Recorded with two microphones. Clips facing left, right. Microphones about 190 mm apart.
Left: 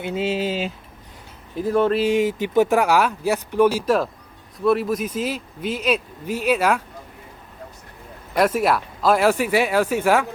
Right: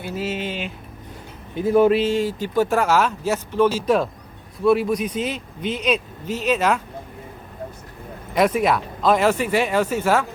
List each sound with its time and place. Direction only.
0.0 s speech: 25° left (ahead or behind)
1.5 s speech: 5° right (ahead or behind)
2.0 s speech: 20° left (ahead or behind)
4.6 s speech: centre (ahead or behind)
8.4 s speech: 5° left (ahead or behind)